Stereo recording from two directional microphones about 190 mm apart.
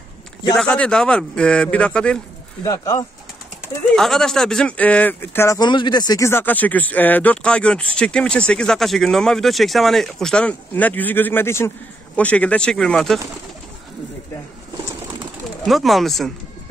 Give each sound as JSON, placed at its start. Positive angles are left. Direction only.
{"t": 0.6, "sound": "a man's voice", "side_deg": 5}
{"t": 2.6, "sound": "speech", "side_deg": 15}
{"t": 3.9, "sound": "a man's voice", "side_deg": 0}
{"t": 15.6, "sound": "a man's voice", "side_deg": 0}